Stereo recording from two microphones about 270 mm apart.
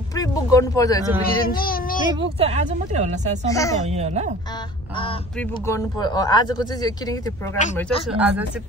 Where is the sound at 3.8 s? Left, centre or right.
Right.